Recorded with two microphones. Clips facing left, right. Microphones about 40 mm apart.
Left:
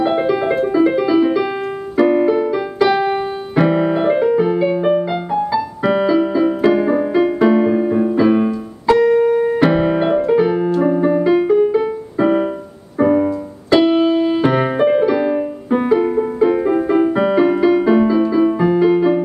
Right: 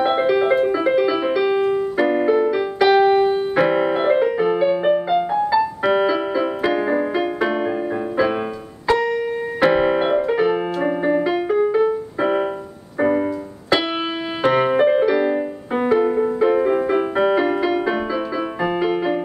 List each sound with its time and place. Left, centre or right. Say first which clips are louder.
0.0 s music: left 1 dB; centre
2.0 s keyboard: left 6 dB; centre
2.4 s piano: left 1 dB; centre
5.6 s keyboard: left 1 dB; centre
10.9 s keyboard: left 4 dB; centre
11.2 s music: left 5 dB; centre
13.8 s keyboard: left 10 dB; centre
14.4 s music: left 1 dB; centre